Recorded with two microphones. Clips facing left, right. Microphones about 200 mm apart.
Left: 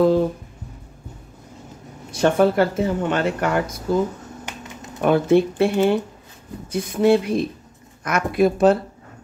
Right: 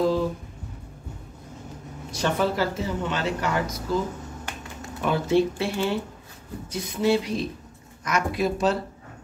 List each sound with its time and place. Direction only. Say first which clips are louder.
2.0 s speech: left 8 dB; 55° left (ahead or behind)
5.0 s speech: left 6 dB; 55° left (ahead or behind)